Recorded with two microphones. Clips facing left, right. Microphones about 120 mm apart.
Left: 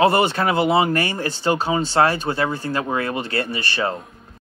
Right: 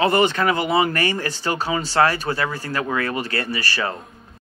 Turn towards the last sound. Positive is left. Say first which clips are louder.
# left 1 dB
turn(degrees=25)  # may be behind; listen again after turning